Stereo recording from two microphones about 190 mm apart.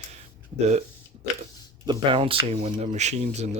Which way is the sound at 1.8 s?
25° right (ahead or behind).